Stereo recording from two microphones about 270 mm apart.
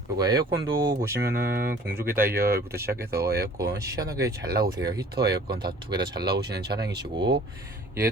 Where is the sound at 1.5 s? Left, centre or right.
Right.